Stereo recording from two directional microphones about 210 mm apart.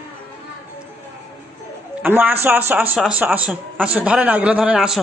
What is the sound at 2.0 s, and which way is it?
A man's voice, 10° right (ahead or behind).